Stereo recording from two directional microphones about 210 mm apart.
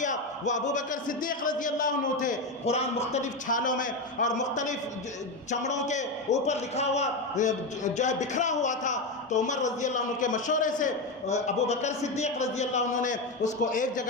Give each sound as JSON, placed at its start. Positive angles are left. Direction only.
{"t": 0.0, "sound": "a man's voice", "side_deg": 35}